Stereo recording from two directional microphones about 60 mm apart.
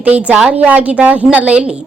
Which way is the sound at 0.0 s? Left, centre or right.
Right.